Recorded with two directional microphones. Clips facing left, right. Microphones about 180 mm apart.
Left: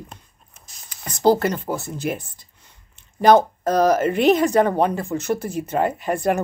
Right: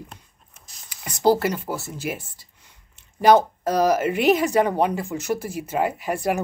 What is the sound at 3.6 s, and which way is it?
Speech, 10° right (ahead or behind).